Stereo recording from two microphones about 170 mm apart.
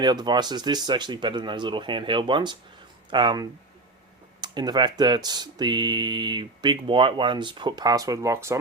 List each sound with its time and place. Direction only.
0.0 s speech: 25° right (ahead or behind)